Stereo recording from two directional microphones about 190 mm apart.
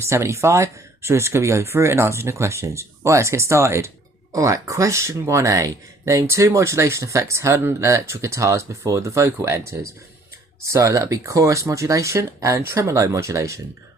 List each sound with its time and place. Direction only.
0.0 s speech: 15° right (ahead or behind)